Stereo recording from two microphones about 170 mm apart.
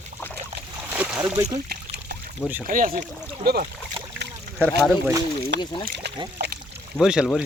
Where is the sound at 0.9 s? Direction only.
10° right (ahead or behind).